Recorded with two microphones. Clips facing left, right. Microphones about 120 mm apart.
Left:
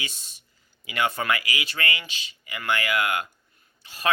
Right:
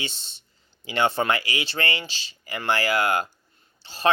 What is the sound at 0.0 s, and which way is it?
Speech, 30° right (ahead or behind).